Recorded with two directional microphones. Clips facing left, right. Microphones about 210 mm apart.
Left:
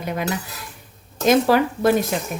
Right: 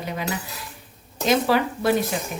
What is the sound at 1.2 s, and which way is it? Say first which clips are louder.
Speech: left 4 dB; 45° left (ahead or behind).